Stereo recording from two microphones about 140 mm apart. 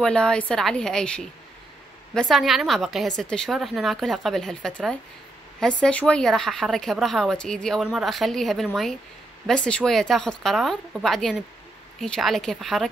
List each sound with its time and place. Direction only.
0.0 s speech: 5° left (ahead or behind)